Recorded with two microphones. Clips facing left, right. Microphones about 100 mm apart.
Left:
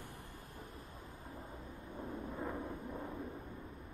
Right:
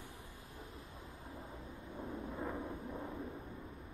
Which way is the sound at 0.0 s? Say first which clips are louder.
Left 1 dB; 55° left (ahead or behind).